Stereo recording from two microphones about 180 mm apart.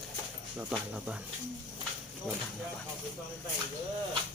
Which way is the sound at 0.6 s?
5° right (ahead or behind).